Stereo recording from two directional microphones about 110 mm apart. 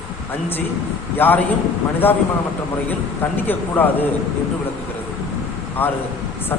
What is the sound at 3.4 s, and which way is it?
Speech, 15° left (ahead or behind).